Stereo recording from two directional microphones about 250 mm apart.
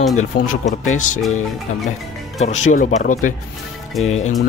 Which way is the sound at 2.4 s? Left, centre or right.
Left.